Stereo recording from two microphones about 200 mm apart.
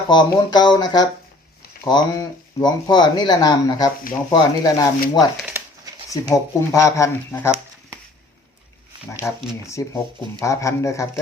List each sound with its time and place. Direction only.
0.1 s speech: 20° left (ahead or behind)
5.4 s crumpling: 10° right (ahead or behind)
6.1 s speech: 15° left (ahead or behind)
9.2 s speech: 15° left (ahead or behind)